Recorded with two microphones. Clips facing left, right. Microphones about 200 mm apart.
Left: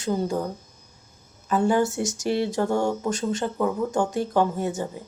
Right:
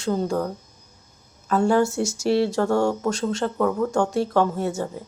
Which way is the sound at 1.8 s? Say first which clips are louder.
Right 2 dB; 20° left (ahead or behind).